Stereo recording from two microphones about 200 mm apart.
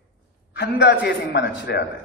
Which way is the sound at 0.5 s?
55° left (ahead or behind).